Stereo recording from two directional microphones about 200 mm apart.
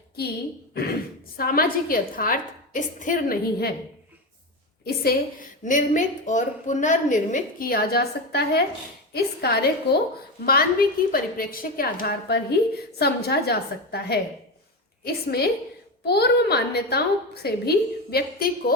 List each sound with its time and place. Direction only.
0.2 s a woman's voice: 50° left (ahead or behind)
4.9 s a woman's voice: 45° left (ahead or behind)